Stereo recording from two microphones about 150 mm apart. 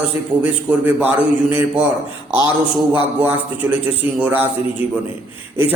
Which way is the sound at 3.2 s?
10° right (ahead or behind).